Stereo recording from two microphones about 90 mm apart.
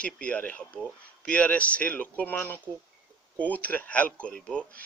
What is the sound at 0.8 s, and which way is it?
Speech, 10° left (ahead or behind).